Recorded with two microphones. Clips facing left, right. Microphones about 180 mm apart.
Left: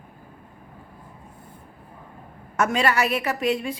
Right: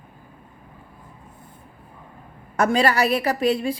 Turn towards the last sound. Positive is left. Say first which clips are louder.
# right 3 dB
turn(degrees=-35)  # may be behind; listen again after turning